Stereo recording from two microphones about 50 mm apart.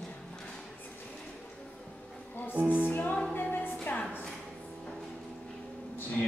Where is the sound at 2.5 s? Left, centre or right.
Right.